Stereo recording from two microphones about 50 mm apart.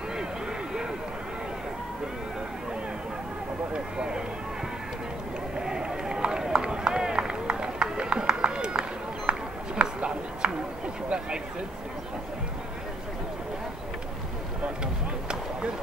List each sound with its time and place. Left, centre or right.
3.7 s speech: centre
5.6 s run: centre
9.8 s a sound: right